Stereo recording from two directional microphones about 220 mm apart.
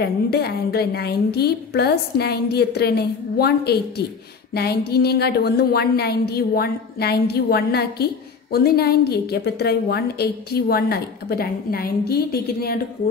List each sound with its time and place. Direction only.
0.0 s a woman's voice: 45° left (ahead or behind)